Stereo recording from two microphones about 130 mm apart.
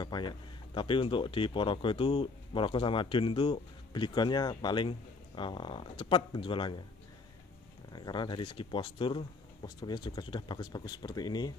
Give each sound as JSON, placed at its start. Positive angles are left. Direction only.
{"t": 0.0, "sound": "speech", "side_deg": 35}
{"t": 7.9, "sound": "speech", "side_deg": 35}